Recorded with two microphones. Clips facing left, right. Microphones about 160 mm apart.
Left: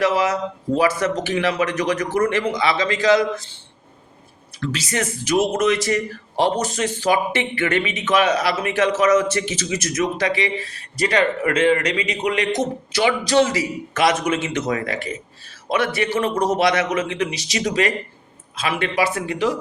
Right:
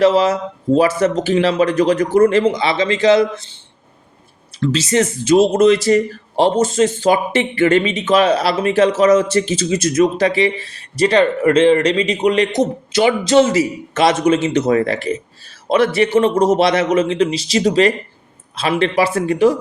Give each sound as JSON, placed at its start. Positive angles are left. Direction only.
{"t": 0.0, "sound": "speech", "side_deg": -30}
{"t": 4.6, "sound": "speech", "side_deg": -25}